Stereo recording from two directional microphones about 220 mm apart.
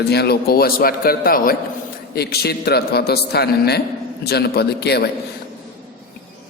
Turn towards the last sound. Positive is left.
turn(degrees=50)  # may be behind; listen again after turning